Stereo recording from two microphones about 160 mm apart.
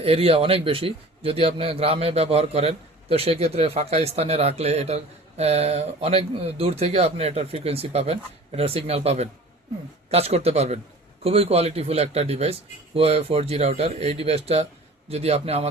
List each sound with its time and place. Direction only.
0.0 s a man's voice: 35° right (ahead or behind)